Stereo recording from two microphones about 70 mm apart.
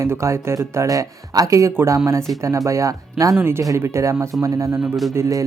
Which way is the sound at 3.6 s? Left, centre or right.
Right.